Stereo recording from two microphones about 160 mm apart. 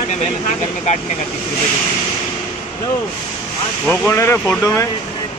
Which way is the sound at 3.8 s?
5° left (ahead or behind).